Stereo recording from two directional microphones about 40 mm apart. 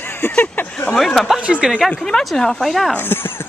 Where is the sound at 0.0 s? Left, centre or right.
Left.